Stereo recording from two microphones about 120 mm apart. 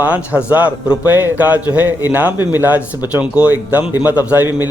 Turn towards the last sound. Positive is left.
turn(degrees=-15)  # may be behind; listen again after turning